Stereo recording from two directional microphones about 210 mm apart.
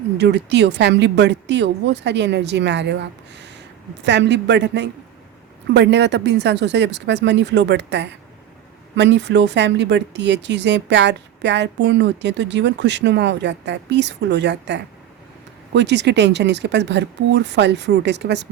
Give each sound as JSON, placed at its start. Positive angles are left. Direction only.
{"t": 0.2, "sound": "speech", "side_deg": -55}